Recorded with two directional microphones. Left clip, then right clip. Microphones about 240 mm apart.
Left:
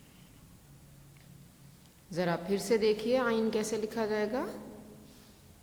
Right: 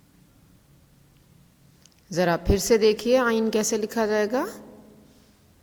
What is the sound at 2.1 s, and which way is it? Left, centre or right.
A woman's voice, right.